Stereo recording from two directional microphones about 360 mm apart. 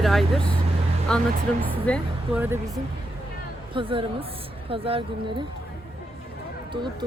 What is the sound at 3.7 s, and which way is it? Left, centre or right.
Speech, centre.